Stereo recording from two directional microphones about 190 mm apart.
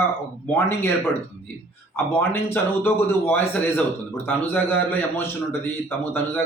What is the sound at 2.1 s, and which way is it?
Speech, 10° left (ahead or behind).